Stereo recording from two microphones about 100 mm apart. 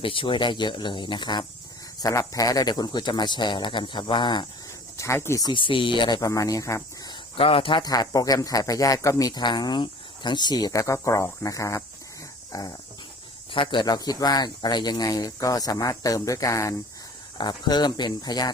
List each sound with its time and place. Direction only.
0.0 s speech: 60° left (ahead or behind)
2.0 s speech: 35° left (ahead or behind)
4.9 s speech: 25° left (ahead or behind)
5.5 s speech: 60° left (ahead or behind)
6.1 s speech: 35° left (ahead or behind)
7.3 s a man's voice: 70° left (ahead or behind)
7.8 s speech: 40° left (ahead or behind)
12.5 s dog: 35° left (ahead or behind)
13.5 s speech: 55° left (ahead or behind)
13.8 s speech: 40° left (ahead or behind)
17.3 s speech: 45° left (ahead or behind)